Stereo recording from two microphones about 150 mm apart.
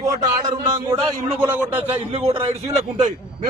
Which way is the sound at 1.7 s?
40° right (ahead or behind).